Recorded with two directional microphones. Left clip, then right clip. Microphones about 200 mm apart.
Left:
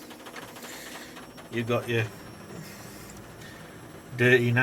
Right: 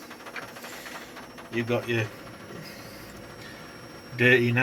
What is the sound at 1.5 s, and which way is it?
Speech, 5° left (ahead or behind).